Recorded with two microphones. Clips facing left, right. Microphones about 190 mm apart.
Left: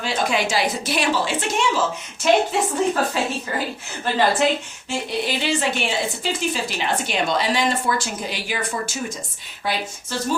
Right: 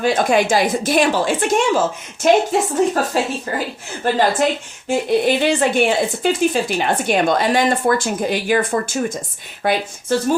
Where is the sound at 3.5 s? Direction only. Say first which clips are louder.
Right 3 dB; 45° right (ahead or behind).